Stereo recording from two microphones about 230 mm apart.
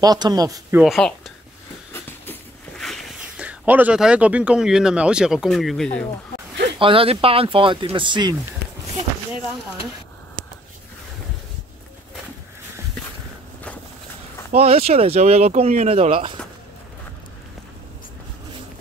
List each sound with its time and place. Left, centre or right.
0.0 s speech: centre
2.8 s speech: centre
6.8 s speech: right
14.5 s speech: right